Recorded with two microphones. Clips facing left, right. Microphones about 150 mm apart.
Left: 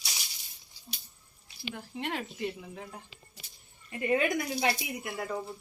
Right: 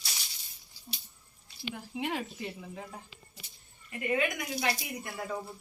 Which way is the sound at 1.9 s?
5° right (ahead or behind).